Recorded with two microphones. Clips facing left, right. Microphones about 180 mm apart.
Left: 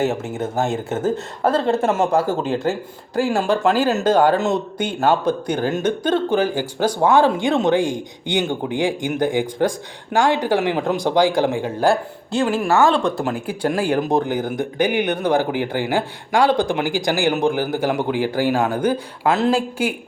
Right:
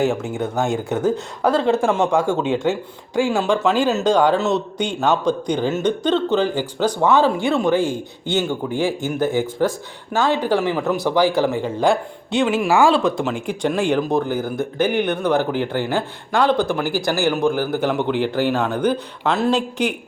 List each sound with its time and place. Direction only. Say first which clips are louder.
0.0 s speech: right 1 dB; centre (ahead or behind)
12.6 s speech: right 1 dB; 10° right (ahead or behind); by 20.0 s 5° left (ahead or behind)